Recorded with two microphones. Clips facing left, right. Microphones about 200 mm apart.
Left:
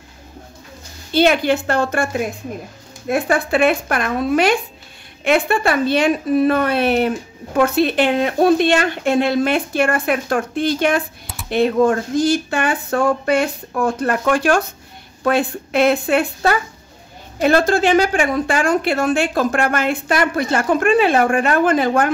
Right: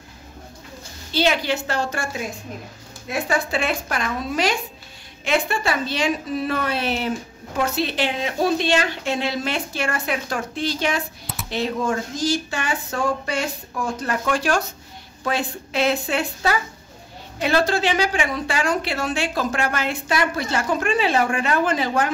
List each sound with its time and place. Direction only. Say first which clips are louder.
1.1 s a woman's voice: left 6 dB; 55° left (ahead or behind)